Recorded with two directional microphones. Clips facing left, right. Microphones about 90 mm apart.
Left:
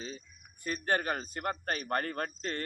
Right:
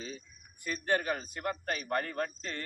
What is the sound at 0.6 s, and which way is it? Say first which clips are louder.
Speech: even; 45° left (ahead or behind).